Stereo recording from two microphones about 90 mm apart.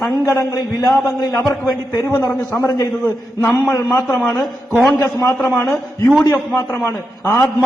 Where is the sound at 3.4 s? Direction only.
25° left (ahead or behind).